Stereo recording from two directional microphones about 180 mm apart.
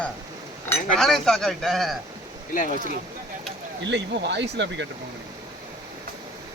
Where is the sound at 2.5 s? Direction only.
45° left (ahead or behind).